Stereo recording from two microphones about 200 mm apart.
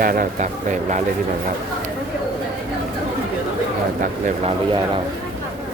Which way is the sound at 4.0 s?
35° right (ahead or behind).